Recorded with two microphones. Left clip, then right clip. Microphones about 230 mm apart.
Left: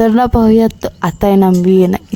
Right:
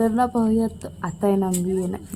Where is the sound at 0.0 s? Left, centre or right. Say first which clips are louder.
Left 10 dB; left.